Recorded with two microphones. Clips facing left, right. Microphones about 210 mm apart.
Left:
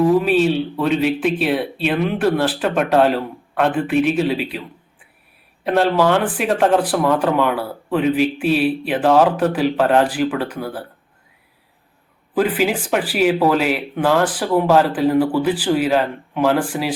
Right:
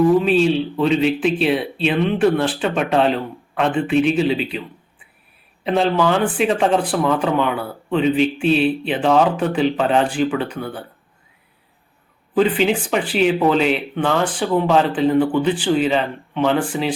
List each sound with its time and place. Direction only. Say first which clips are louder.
0.1 s speech: even; centre (ahead or behind)
12.3 s speech: right 1 dB; 5° left (ahead or behind)